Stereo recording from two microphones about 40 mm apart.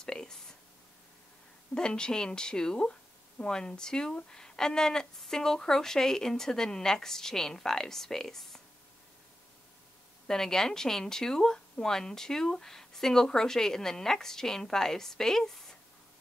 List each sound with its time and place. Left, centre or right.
0.0 s a sound: centre
1.8 s speech: left
10.2 s speech: centre